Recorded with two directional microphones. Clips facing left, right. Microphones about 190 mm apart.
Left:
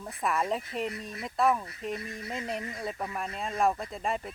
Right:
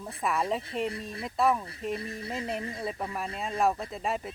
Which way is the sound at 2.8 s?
Centre (ahead or behind).